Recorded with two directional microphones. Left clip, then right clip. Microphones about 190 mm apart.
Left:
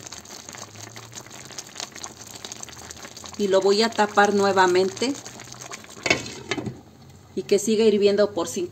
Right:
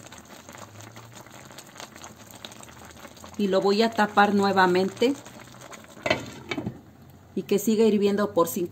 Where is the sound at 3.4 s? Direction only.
55° right (ahead or behind).